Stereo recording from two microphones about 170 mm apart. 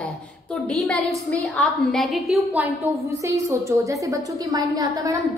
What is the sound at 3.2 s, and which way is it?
A woman's voice, 15° right (ahead or behind).